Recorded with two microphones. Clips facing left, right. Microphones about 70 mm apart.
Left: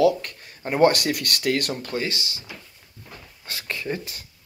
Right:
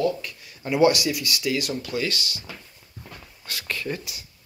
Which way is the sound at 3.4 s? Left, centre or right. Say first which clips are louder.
Even; left.